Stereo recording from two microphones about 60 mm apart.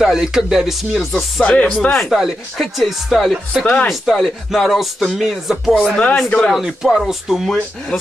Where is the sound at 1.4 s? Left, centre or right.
Left.